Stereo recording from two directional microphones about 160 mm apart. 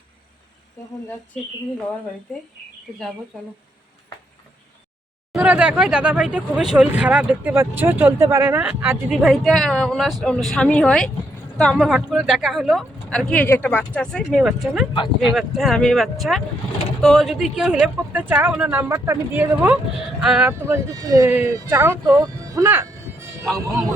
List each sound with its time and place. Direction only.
5.3 s speech: 5° right (ahead or behind)
9.2 s speech: centre (ahead or behind)
20.5 s speech: 20° right (ahead or behind)